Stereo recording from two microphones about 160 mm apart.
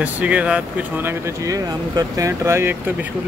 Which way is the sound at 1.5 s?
20° right (ahead or behind).